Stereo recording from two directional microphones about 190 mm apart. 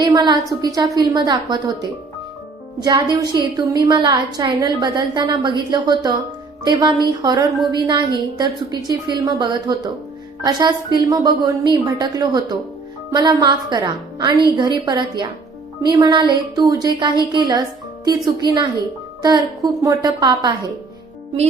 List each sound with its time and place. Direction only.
0.0 s a woman's voice: 25° right (ahead or behind)
2.8 s a woman's voice: 20° right (ahead or behind)
19.2 s a woman's voice: 20° right (ahead or behind)